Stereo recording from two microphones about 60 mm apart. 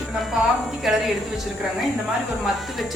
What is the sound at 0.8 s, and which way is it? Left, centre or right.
Speech, centre.